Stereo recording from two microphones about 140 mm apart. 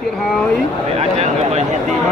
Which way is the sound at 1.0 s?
50° right (ahead or behind).